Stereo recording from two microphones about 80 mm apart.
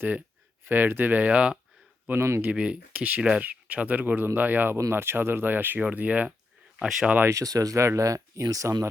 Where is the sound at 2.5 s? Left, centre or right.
Centre.